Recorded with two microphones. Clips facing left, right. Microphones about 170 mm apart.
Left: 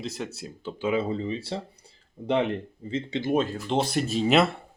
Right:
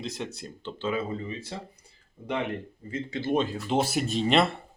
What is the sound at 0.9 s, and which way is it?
Speech, 20° left (ahead or behind).